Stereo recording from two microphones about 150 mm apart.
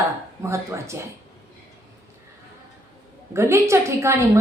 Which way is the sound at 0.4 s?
20° right (ahead or behind).